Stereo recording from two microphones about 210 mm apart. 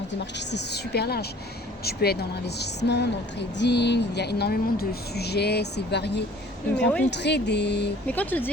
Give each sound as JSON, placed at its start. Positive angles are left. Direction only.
{"t": 0.3, "sound": "a woman's voice", "side_deg": 55}
{"t": 6.8, "sound": "speech", "side_deg": 5}
{"t": 7.1, "sound": "a woman's voice", "side_deg": 55}
{"t": 8.0, "sound": "speech", "side_deg": 10}